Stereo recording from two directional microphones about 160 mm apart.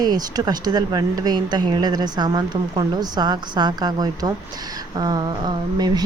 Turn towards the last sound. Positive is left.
turn(degrees=-25)  # may be behind; listen again after turning